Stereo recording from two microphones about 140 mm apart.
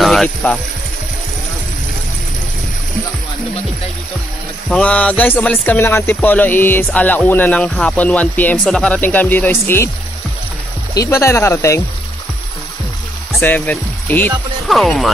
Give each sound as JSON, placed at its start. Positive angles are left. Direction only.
{"t": 0.0, "sound": "speech", "side_deg": 5}
{"t": 4.6, "sound": "speech", "side_deg": 10}
{"t": 11.0, "sound": "speech", "side_deg": 20}
{"t": 13.4, "sound": "speech", "side_deg": 15}
{"t": 14.7, "sound": "speech", "side_deg": 0}